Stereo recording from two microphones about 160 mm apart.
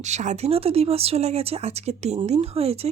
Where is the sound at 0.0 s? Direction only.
45° right (ahead or behind).